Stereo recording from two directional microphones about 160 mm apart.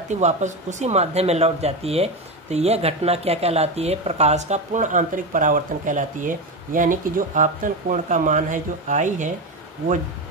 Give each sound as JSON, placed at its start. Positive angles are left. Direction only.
{"t": 0.1, "sound": "speech", "side_deg": -50}